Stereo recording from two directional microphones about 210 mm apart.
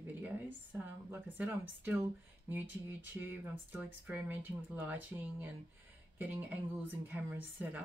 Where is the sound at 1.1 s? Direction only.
10° right (ahead or behind).